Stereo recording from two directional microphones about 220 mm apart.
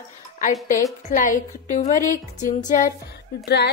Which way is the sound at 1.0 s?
35° left (ahead or behind).